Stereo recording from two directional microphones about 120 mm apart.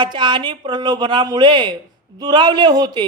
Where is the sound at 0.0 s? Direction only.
40° right (ahead or behind).